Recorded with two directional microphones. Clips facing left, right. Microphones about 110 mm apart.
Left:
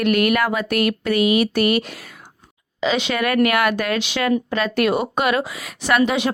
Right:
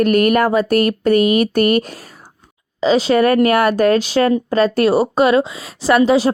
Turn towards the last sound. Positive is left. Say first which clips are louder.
# right 6 dB
turn(degrees=-30)  # may be behind; listen again after turning